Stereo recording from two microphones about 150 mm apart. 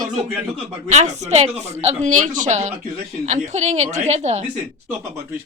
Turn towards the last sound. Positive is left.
turn(degrees=-45)  # may be behind; listen again after turning